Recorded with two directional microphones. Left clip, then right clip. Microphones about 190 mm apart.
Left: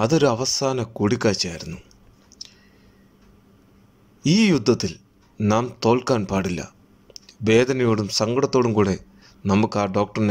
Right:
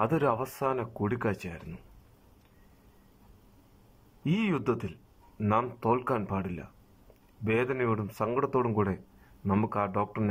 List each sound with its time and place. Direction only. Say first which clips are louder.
0.0 s speech: left 8 dB; 30° left (ahead or behind)
4.2 s speech: left 11 dB; 35° left (ahead or behind)